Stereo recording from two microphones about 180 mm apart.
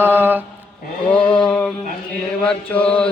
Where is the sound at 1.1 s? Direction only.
5° left (ahead or behind).